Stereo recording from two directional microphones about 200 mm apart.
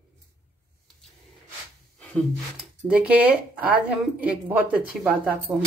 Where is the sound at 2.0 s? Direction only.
Centre (ahead or behind).